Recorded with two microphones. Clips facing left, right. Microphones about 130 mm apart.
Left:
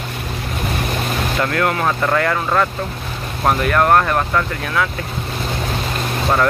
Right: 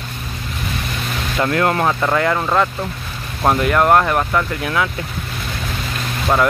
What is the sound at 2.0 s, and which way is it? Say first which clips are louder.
Speech: right 1 dB; 10° right (ahead or behind).